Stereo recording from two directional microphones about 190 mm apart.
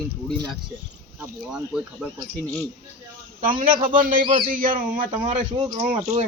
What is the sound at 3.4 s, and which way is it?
A man's voice, 45° right (ahead or behind).